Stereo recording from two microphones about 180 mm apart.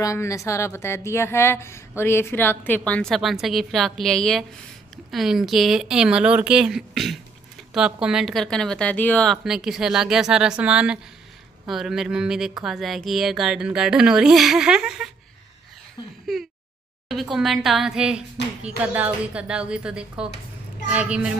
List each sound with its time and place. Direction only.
0.0 s a woman's voice: 15° left (ahead or behind); by 15.0 s 5° right (ahead or behind)
16.0 s a sound: 25° left (ahead or behind)
17.1 s a child's voice: centre (ahead or behind)